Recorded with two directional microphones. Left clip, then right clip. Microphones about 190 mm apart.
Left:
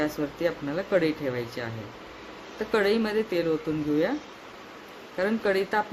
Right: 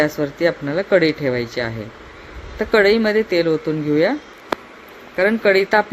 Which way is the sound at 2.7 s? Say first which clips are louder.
Right 10 dB; 25° right (ahead or behind).